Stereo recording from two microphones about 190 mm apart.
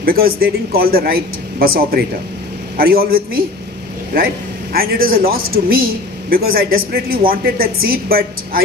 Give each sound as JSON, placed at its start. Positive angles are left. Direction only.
{"t": 0.0, "sound": "speech", "side_deg": -50}
{"t": 4.7, "sound": "speech", "side_deg": -50}